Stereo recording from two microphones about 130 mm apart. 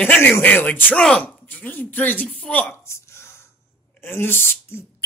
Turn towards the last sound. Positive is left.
turn(degrees=20)  # may be behind; listen again after turning